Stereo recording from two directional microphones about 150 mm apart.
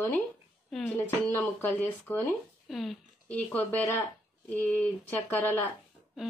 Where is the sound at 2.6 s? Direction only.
Centre (ahead or behind).